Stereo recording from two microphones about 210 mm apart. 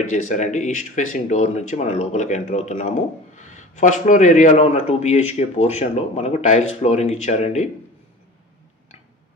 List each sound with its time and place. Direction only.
0.3 s speech: 35° left (ahead or behind)